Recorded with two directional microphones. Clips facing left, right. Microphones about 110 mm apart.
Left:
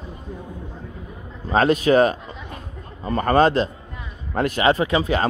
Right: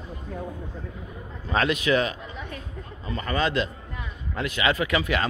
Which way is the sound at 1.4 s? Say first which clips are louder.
Left 6 dB; 40° left (ahead or behind).